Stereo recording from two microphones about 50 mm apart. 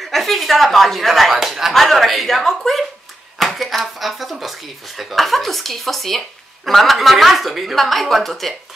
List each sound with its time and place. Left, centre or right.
0.0 s speech: centre
1.7 s speech: centre